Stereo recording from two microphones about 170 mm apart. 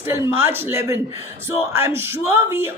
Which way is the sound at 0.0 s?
15° right (ahead or behind).